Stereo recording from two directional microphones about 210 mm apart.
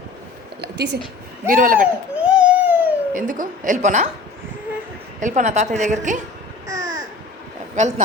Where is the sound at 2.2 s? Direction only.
5° right (ahead or behind).